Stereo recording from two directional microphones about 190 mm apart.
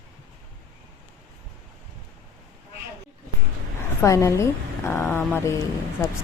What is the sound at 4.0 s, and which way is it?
A woman's voice, 15° left (ahead or behind).